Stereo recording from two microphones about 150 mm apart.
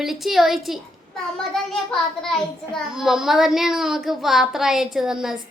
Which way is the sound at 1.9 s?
5° left (ahead or behind).